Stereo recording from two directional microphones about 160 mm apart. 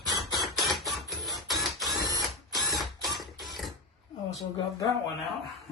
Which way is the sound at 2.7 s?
Centre (ahead or behind).